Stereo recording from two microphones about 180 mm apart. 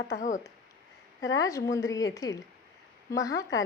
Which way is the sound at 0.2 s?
45° left (ahead or behind).